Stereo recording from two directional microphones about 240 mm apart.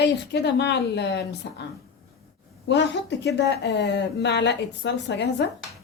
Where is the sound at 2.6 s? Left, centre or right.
Left.